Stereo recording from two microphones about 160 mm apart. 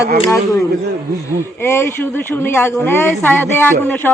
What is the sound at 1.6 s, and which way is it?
Speech, 15° left (ahead or behind).